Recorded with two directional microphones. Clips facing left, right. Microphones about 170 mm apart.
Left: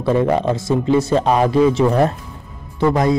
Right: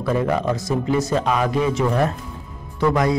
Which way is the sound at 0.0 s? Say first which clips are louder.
Left 4 dB; 25° left (ahead or behind).